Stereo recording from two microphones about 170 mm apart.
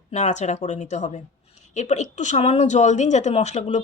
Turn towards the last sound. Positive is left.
turn(degrees=45)  # may be behind; listen again after turning